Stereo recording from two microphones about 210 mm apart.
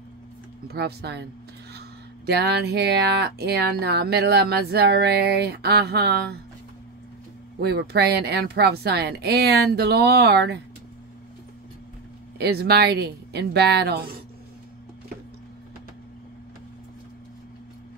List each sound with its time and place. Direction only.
0.7 s speech: 50° right (ahead or behind)
7.6 s speech: 50° right (ahead or behind)
12.4 s speech: 50° right (ahead or behind)